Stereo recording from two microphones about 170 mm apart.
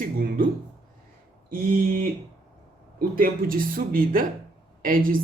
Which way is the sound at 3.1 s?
55° right (ahead or behind).